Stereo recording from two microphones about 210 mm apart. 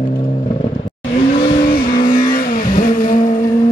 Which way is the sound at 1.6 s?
40° left (ahead or behind).